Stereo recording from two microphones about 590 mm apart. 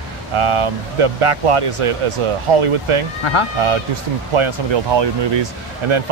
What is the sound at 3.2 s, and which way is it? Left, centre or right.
Speech, left.